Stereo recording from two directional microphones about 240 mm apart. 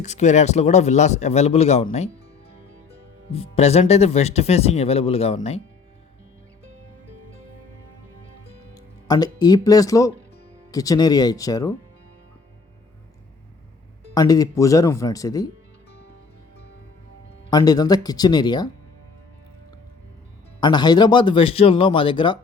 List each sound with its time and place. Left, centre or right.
0.0 s speech: left
3.3 s speech: left
8.7 s speech: centre
14.1 s speech: centre
17.5 s speech: centre
20.6 s speech: centre